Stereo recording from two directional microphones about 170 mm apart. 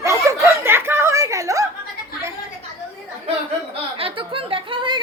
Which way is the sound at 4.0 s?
30° right (ahead or behind).